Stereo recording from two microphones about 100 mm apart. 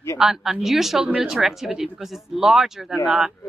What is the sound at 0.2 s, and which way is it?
Speech, 5° right (ahead or behind).